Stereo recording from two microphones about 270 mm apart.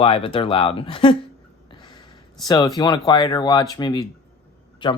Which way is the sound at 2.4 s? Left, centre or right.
Centre.